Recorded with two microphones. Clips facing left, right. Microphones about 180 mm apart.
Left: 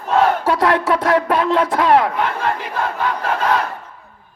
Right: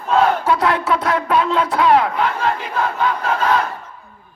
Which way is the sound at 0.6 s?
50° left (ahead or behind).